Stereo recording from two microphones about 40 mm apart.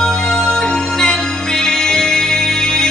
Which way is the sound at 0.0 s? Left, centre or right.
Centre.